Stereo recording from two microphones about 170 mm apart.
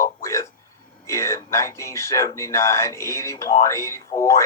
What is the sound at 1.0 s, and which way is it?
Speech, 15° left (ahead or behind).